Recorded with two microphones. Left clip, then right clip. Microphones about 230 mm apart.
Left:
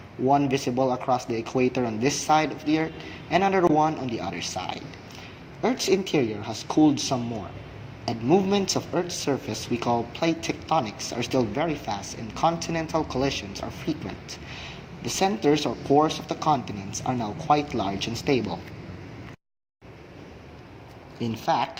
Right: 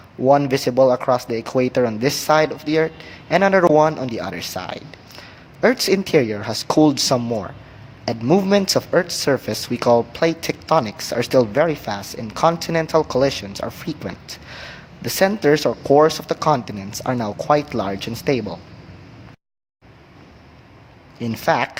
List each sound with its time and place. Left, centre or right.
0.3 s speech: right